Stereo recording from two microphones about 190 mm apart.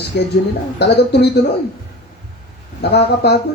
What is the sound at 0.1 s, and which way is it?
Speech, 60° left (ahead or behind).